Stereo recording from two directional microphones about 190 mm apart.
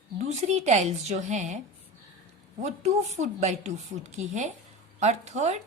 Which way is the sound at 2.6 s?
35° right (ahead or behind).